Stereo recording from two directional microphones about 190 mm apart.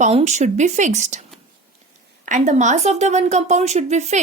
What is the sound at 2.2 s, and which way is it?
A woman's voice, 40° right (ahead or behind).